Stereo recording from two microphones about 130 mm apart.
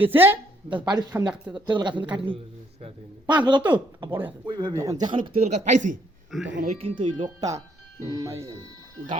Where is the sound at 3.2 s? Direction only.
35° right (ahead or behind).